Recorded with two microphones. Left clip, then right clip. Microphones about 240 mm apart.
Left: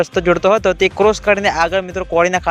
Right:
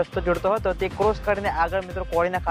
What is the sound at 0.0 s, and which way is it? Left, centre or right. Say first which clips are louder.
Speech: left 9 dB; left.